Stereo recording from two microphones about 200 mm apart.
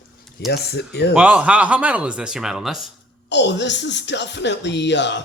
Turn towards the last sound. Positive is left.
turn(degrees=60)  # may be behind; listen again after turning